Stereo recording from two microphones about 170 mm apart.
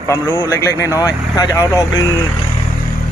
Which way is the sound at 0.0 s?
15° left (ahead or behind).